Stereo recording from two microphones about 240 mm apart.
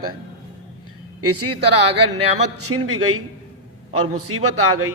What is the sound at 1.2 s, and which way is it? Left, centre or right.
Speech, right.